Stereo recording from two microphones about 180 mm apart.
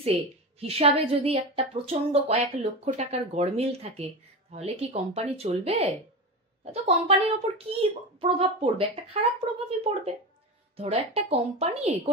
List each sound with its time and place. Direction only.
0.0 s a woman's voice: 35° right (ahead or behind)